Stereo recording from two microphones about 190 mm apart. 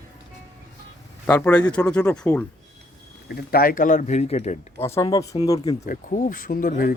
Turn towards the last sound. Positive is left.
turn(degrees=50)  # may be behind; listen again after turning